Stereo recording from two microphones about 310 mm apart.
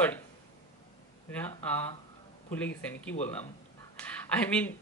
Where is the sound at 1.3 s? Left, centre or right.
Centre.